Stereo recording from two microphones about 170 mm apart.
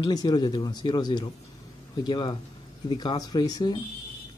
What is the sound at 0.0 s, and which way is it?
Speech, 25° left (ahead or behind).